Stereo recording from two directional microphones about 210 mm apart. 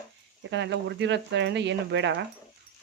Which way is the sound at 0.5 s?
55° right (ahead or behind).